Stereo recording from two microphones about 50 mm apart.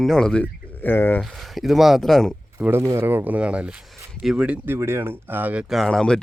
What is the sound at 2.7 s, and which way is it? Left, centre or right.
Speech, right.